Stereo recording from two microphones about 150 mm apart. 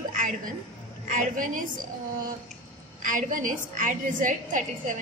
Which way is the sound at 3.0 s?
60° right (ahead or behind).